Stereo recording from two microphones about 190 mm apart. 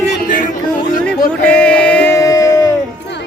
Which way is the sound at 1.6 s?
5° left (ahead or behind).